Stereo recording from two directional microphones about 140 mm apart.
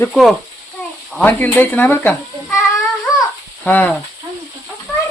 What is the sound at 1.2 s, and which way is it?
Sizzle, 15° left (ahead or behind).